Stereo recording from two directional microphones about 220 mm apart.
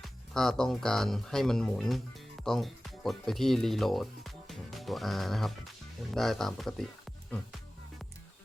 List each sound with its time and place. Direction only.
0.0 s speech: centre (ahead or behind)